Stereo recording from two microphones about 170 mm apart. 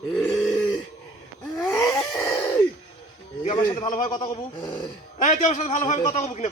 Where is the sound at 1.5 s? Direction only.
20° left (ahead or behind).